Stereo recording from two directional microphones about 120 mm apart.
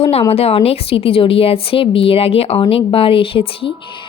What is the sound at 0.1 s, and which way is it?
A woman's voice, 55° left (ahead or behind).